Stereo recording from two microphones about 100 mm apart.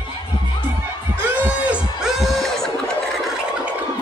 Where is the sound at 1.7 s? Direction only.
5° right (ahead or behind).